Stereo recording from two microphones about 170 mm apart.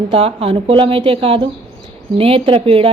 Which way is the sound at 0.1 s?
35° right (ahead or behind).